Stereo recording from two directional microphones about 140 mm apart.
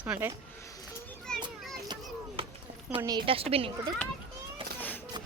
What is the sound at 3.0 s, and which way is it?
Speech, 35° right (ahead or behind).